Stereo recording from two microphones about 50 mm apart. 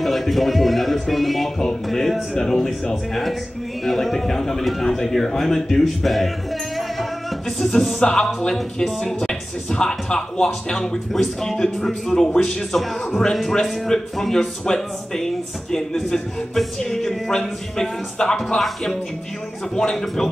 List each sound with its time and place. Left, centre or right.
0.0 s music: centre
3.8 s a man's voice: centre
6.8 s music: centre
9.0 s a man's voice: centre
19.7 s a man's voice: centre